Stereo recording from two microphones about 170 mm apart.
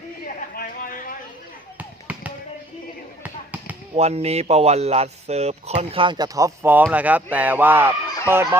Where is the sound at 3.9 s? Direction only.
40° right (ahead or behind).